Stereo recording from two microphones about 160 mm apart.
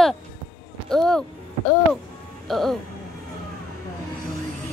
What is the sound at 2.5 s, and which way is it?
Speech, centre (ahead or behind).